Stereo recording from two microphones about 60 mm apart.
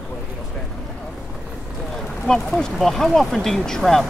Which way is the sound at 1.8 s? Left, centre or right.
Centre.